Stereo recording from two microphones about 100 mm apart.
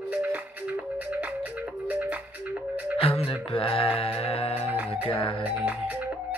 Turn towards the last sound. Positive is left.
turn(degrees=-15)  # may be behind; listen again after turning